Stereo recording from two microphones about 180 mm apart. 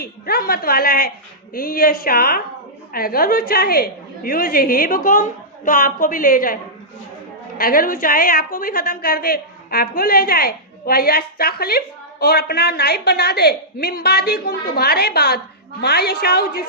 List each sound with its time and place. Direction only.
0.0 s a woman's voice: 55° left (ahead or behind)
7.6 s a woman's voice: 55° left (ahead or behind)